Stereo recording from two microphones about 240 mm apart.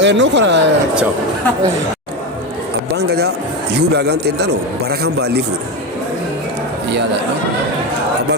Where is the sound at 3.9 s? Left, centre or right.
Right.